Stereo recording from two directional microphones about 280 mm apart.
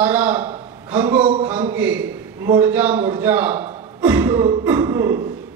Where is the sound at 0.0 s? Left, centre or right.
Centre.